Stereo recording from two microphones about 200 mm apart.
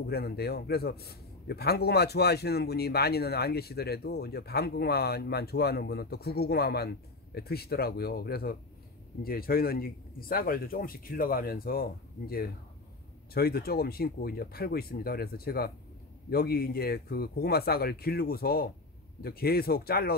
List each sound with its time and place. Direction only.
0.0 s a man's voice: 50° left (ahead or behind)